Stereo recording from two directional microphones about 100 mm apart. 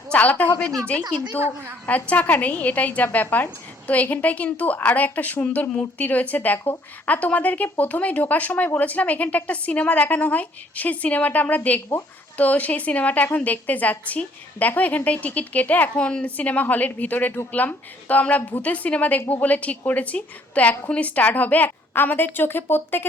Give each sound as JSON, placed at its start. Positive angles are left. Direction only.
{"t": 0.1, "sound": "a woman's voice", "side_deg": 15}
{"t": 1.4, "sound": "a woman's voice", "side_deg": -20}
{"t": 1.9, "sound": "a woman's voice", "side_deg": 15}